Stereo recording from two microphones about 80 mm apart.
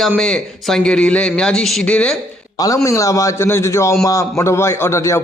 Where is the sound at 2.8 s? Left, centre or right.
Left.